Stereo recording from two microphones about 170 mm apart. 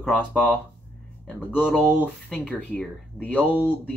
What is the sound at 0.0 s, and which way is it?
Speech, 5° left (ahead or behind).